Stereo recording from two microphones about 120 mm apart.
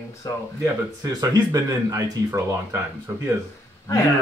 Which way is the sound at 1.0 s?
30° right (ahead or behind).